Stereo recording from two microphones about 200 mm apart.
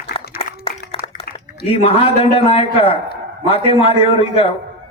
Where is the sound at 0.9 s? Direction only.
30° left (ahead or behind).